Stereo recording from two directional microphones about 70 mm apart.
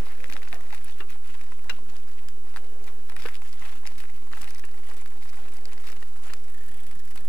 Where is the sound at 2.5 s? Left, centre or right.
Centre.